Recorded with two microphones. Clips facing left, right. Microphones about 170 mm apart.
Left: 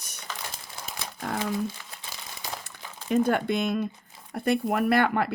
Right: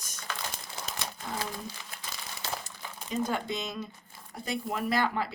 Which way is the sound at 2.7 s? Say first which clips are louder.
Left 9 dB; 60° left (ahead or behind).